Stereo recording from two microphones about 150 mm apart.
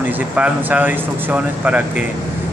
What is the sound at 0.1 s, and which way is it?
Speech, 10° right (ahead or behind).